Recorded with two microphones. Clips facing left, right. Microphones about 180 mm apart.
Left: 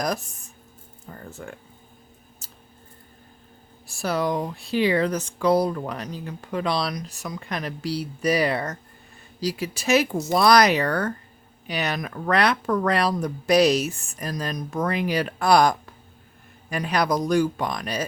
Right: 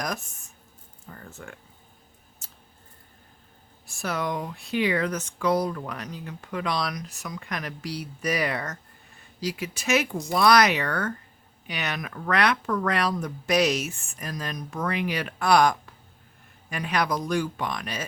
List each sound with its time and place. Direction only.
0.0 s speech: 35° left (ahead or behind)
2.4 s a sound: 35° left (ahead or behind)
3.8 s speech: 35° left (ahead or behind)